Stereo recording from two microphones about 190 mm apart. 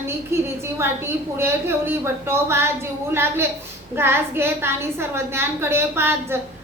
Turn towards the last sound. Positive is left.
turn(degrees=-10)  # may be behind; listen again after turning